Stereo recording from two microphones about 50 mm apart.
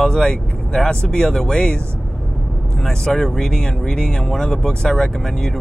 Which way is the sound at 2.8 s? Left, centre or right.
Centre.